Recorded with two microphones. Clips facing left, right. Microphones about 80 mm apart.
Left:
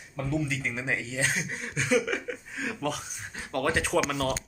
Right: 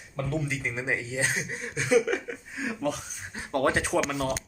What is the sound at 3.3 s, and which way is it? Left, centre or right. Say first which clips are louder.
Speech: right 2 dB; right.